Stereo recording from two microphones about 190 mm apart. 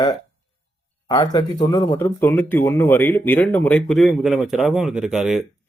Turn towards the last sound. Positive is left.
turn(degrees=0)  # may be behind; listen again after turning